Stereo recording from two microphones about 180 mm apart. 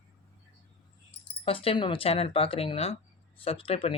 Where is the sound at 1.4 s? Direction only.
30° left (ahead or behind).